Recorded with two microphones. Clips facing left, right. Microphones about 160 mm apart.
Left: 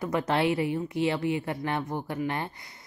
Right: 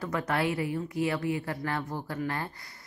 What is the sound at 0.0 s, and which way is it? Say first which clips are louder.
A woman's voice: left 3 dB; 25° left (ahead or behind).